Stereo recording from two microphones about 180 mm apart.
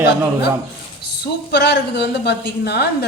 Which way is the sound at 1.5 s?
70° left (ahead or behind).